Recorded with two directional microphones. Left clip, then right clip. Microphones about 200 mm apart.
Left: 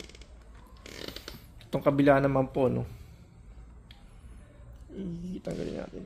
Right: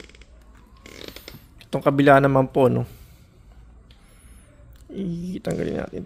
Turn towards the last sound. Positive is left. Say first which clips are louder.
# right 9 dB
turn(degrees=-50)  # may be behind; listen again after turning